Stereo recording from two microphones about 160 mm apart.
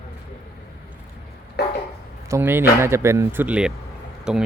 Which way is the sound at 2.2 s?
15° right (ahead or behind).